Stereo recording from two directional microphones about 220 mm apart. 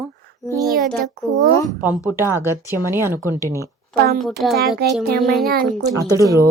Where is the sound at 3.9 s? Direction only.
45° right (ahead or behind).